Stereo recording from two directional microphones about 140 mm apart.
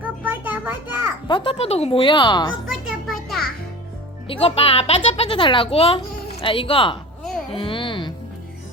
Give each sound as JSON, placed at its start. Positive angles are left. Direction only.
{"t": 0.0, "sound": "music", "side_deg": -10}
{"t": 1.3, "sound": "a woman's voice", "side_deg": 35}
{"t": 2.6, "sound": "music", "side_deg": 0}
{"t": 4.3, "sound": "a child's voice", "side_deg": 45}
{"t": 7.5, "sound": "a sound", "side_deg": 35}